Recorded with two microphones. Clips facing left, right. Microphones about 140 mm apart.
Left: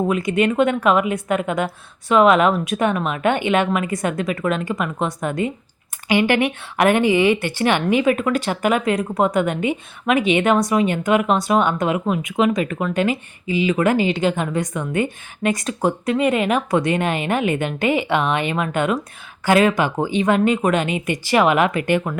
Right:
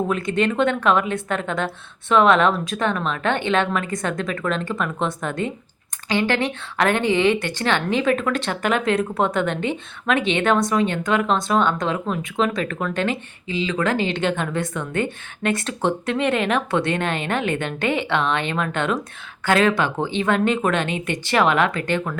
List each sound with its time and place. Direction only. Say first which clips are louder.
0.1 s speech: left 3 dB; 5° left (ahead or behind)
6.1 s speech: left 4 dB; 15° left (ahead or behind)